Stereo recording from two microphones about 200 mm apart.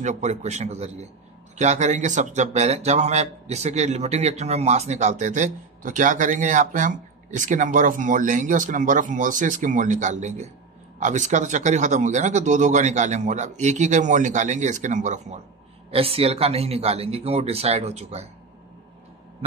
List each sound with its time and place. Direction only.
0.0 s a man's voice: 35° right (ahead or behind)